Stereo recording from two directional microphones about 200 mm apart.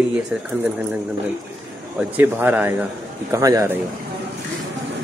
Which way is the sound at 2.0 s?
10° right (ahead or behind).